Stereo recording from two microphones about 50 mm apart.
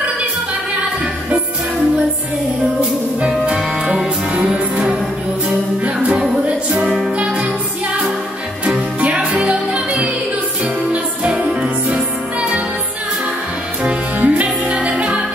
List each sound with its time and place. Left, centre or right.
2.8 s music: centre
4.3 s music: right
6.8 s music: centre
7.2 s music: right
9.0 s music: right
13.8 s music: right